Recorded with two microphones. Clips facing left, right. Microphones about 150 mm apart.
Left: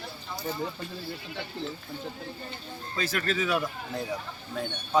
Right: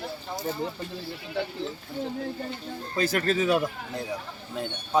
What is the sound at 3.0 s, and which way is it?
Speech, 35° right (ahead or behind).